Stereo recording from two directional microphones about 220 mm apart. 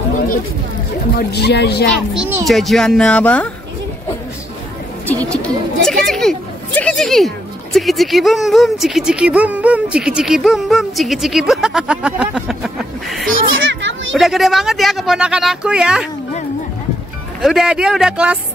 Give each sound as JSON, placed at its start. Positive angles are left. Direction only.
{"t": 1.1, "sound": "speech", "side_deg": 50}
{"t": 2.1, "sound": "speech", "side_deg": -5}
{"t": 5.0, "sound": "speech", "side_deg": 5}
{"t": 13.7, "sound": "children playing", "side_deg": -60}
{"t": 14.1, "sound": "speech", "side_deg": 0}
{"t": 17.4, "sound": "speech", "side_deg": 0}